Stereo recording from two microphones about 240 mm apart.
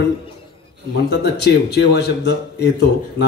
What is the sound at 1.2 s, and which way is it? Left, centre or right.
Speech, left.